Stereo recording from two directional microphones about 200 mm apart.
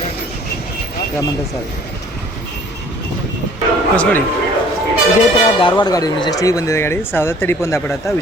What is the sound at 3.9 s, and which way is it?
Speech, 5° left (ahead or behind).